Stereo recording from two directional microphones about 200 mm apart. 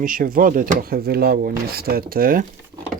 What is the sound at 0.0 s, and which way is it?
Speech, 45° right (ahead or behind).